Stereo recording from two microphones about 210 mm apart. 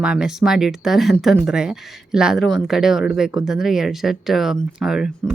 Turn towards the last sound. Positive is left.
turn(degrees=-5)  # may be behind; listen again after turning